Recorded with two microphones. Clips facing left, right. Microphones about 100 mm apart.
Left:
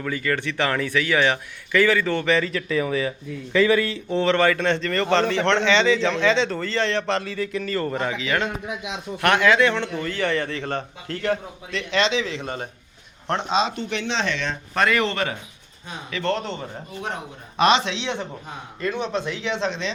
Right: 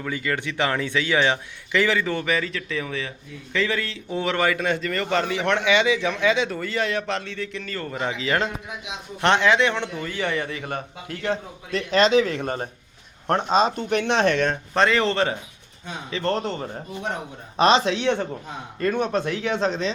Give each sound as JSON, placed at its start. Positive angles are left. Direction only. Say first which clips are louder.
{"t": 0.0, "sound": "a man's voice", "louder": "left 2 dB", "side_deg": -20}
{"t": 2.5, "sound": "speech", "louder": "left 6 dB", "side_deg": 5}
{"t": 4.1, "sound": "a man's voice", "louder": "left 3 dB", "side_deg": -10}
{"t": 8.0, "sound": "a man's voice", "louder": "even", "side_deg": -30}
{"t": 9.2, "sound": "a man's voice", "louder": "left 1 dB", "side_deg": -20}
{"t": 11.7, "sound": "speech", "louder": "right 4 dB", "side_deg": -40}
{"t": 14.7, "sound": "a man's voice", "louder": "left 1 dB", "side_deg": -25}